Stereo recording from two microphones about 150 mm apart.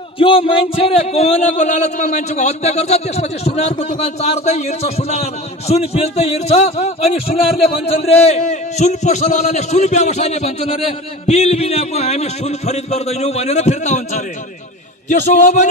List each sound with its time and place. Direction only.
0.2 s speech: 35° left (ahead or behind); by 15.7 s 50° left (ahead or behind)